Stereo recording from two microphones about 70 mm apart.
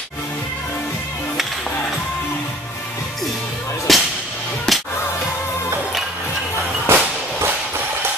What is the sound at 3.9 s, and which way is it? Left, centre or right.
Music, centre.